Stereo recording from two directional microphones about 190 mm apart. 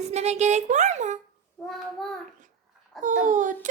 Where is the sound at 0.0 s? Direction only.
35° right (ahead or behind).